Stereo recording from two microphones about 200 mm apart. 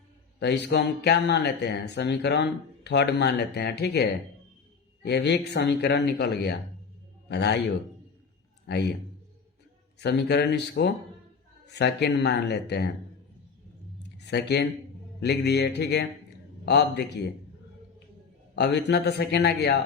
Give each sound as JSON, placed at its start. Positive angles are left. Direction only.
{"t": 0.3, "sound": "speech", "side_deg": 60}
{"t": 8.6, "sound": "speech", "side_deg": 55}
{"t": 10.0, "sound": "speech", "side_deg": 60}
{"t": 14.3, "sound": "speech", "side_deg": 55}
{"t": 18.5, "sound": "speech", "side_deg": 60}